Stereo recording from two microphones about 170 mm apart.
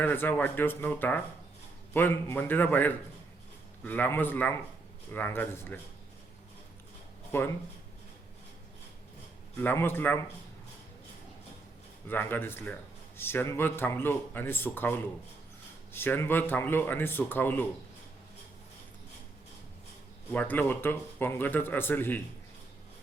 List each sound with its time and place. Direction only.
0.0 s speech: 10° left (ahead or behind)
7.3 s speech: 15° left (ahead or behind)
9.6 s speech: 10° left (ahead or behind)
12.0 s speech: 10° left (ahead or behind)
20.3 s speech: 10° left (ahead or behind)